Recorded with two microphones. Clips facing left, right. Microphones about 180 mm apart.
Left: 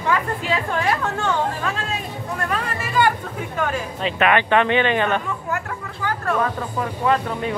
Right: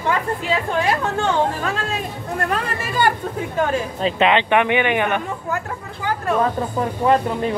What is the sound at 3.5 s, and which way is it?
Speech, 25° right (ahead or behind).